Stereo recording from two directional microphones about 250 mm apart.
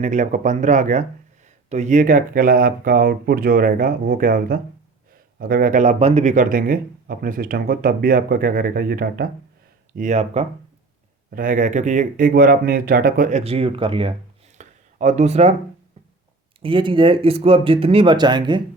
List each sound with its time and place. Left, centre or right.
0.0 s speech: right
14.6 s a sound: right
16.6 s speech: centre